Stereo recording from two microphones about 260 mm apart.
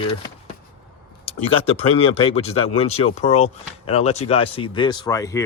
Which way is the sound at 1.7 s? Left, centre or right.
Left.